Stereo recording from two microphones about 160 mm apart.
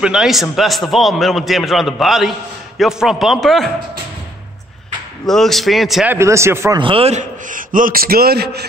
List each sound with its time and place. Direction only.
0.0 s a man's voice: 5° right (ahead or behind)
5.2 s a man's voice: centre (ahead or behind)
6.1 s speech: 15° right (ahead or behind)
6.8 s a man's voice: 35° right (ahead or behind); by 8.6 s 80° right